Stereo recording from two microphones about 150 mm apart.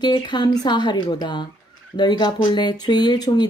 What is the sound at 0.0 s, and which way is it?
Speech, 30° left (ahead or behind).